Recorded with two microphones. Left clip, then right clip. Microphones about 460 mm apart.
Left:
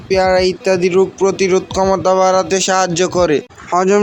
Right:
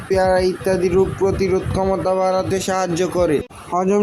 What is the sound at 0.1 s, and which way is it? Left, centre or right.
Speech, right.